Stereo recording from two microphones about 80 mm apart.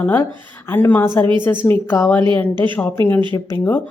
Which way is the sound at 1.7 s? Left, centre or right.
Left.